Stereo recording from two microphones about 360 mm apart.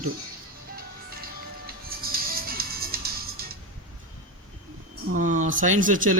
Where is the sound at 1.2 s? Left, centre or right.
Right.